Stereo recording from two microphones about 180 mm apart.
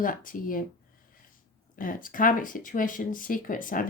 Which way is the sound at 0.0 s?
50° left (ahead or behind).